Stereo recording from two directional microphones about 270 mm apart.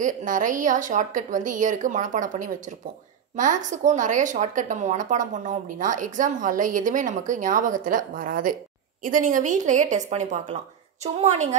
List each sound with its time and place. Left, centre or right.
0.0 s speech: right